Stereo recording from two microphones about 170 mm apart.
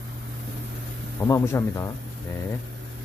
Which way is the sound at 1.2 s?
15° left (ahead or behind).